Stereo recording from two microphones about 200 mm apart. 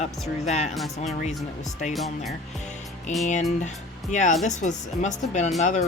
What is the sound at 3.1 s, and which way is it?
Speech, 35° left (ahead or behind).